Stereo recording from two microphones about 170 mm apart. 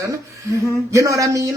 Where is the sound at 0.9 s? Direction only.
20° right (ahead or behind).